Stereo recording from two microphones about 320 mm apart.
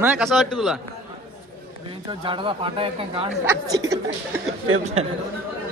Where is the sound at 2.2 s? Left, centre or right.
Centre.